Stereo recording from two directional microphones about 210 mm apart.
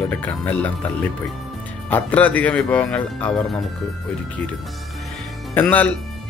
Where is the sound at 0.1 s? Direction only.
10° left (ahead or behind).